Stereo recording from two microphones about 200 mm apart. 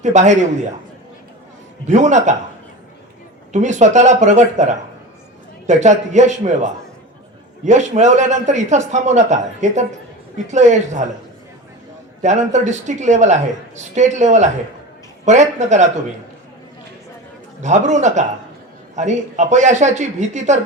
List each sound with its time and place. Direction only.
0.0 s a man's voice: 35° right (ahead or behind)
1.9 s a man's voice: 35° right (ahead or behind)
3.5 s a man's voice: 35° right (ahead or behind)
12.2 s a man's voice: 35° right (ahead or behind)
17.6 s a man's voice: 35° right (ahead or behind)